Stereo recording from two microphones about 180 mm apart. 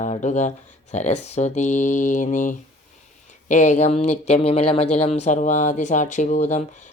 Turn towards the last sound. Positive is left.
turn(degrees=40)  # may be behind; listen again after turning